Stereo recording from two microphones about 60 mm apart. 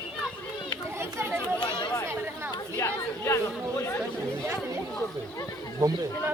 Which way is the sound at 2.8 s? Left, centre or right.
Left.